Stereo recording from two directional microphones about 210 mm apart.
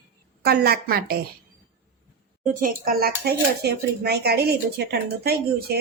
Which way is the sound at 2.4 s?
40° right (ahead or behind).